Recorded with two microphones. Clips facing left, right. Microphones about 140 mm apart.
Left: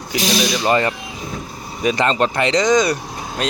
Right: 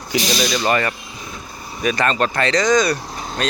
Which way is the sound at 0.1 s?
10° left (ahead or behind).